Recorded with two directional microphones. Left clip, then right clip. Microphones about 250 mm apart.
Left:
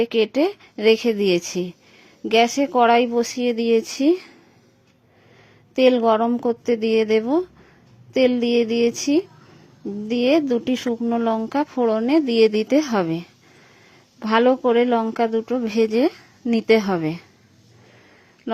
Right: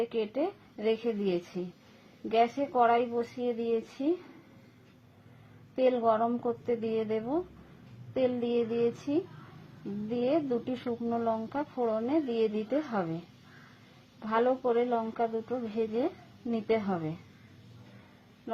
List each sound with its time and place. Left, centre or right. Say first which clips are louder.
0.0 s speech: left 12 dB; left
5.7 s speech: left 10 dB; left
10.2 s speech: left 11 dB; left
14.2 s speech: left 11 dB; left